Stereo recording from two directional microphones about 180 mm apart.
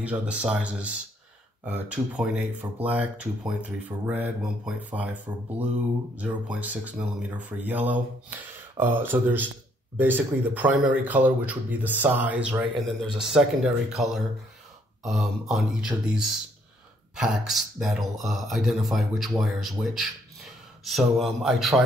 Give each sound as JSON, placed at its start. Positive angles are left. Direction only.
{"t": 0.0, "sound": "speech", "side_deg": -5}